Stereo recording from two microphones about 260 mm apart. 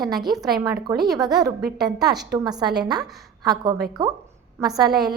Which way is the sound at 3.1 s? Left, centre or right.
Centre.